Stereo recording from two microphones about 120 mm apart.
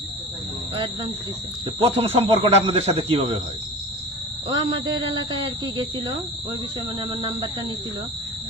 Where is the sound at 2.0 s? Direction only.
55° right (ahead or behind).